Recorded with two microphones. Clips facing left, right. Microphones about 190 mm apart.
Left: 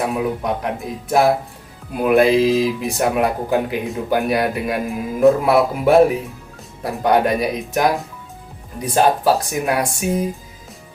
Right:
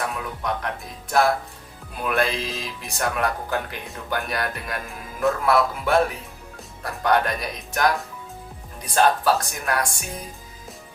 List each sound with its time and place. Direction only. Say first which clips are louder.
0.0 s speech: left 8 dB; 20° left (ahead or behind)
3.0 s speech: left 6 dB; 15° left (ahead or behind)
9.0 s speech: left 4 dB; 20° left (ahead or behind)
9.5 s speech: left 6 dB; 10° left (ahead or behind)